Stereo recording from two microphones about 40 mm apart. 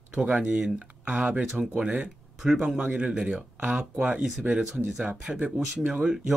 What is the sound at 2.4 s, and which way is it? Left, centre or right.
Speech, centre.